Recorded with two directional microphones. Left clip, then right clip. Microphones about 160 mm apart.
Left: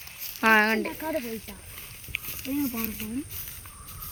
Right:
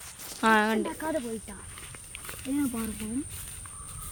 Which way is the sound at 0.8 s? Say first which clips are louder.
Left 1 dB; 35° left (ahead or behind).